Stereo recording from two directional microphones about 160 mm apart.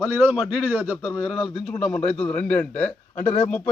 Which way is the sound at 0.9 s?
10° left (ahead or behind).